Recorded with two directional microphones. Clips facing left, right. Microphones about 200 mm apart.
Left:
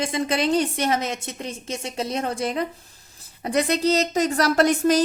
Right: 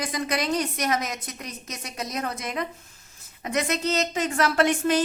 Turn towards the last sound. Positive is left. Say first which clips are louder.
# left 4 dB
turn(degrees=40)  # may be behind; listen again after turning